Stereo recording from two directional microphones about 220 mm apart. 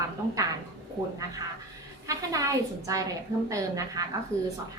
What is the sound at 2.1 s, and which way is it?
A woman's voice, 15° right (ahead or behind).